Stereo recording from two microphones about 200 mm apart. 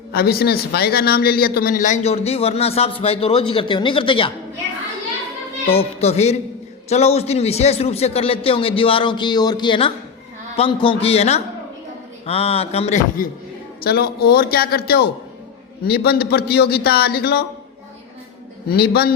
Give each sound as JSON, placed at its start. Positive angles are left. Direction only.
{"t": 0.1, "sound": "speech", "side_deg": 50}
{"t": 5.7, "sound": "a man's voice", "side_deg": 30}
{"t": 13.8, "sound": "a man's voice", "side_deg": 50}
{"t": 18.7, "sound": "a man's voice", "side_deg": 50}